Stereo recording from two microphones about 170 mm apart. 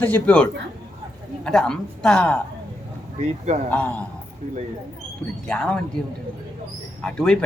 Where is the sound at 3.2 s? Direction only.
45° right (ahead or behind).